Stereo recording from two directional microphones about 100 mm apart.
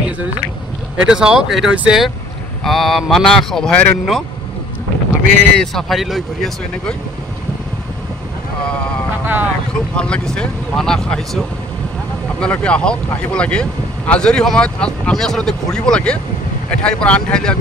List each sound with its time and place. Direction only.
1.0 s speech: 10° right (ahead or behind)
5.4 s speech: 10° left (ahead or behind)
9.2 s vehicle: 20° right (ahead or behind)
9.9 s speech: 10° left (ahead or behind)